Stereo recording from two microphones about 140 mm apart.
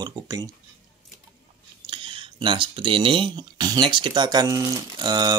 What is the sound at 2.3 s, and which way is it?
Speech, 35° right (ahead or behind).